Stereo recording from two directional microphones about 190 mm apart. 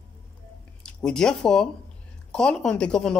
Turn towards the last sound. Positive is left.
turn(degrees=5)  # may be behind; listen again after turning